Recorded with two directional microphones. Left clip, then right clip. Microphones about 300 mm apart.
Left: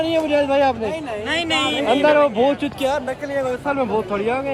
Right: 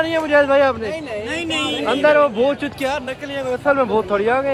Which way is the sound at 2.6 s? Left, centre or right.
Centre.